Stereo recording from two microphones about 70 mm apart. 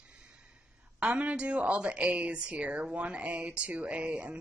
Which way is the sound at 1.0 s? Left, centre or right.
Centre.